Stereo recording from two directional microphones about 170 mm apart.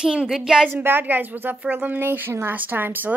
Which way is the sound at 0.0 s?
5° right (ahead or behind).